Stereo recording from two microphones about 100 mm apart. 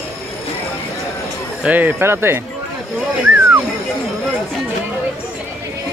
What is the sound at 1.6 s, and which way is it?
Speech, 20° right (ahead or behind).